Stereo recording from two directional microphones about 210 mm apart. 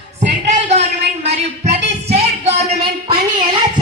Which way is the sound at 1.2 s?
30° right (ahead or behind).